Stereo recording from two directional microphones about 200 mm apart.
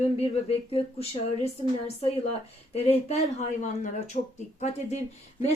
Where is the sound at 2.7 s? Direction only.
30° left (ahead or behind).